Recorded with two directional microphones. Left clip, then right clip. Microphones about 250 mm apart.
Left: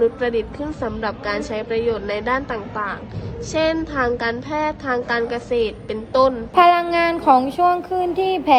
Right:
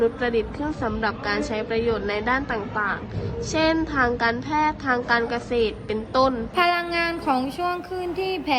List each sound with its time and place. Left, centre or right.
0.0 s a woman's voice: centre
6.8 s child singing: centre